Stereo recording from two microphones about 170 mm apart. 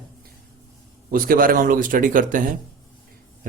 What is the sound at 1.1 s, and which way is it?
Speech, 55° right (ahead or behind).